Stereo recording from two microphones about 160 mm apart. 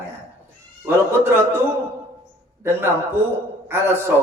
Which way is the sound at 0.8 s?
15° right (ahead or behind).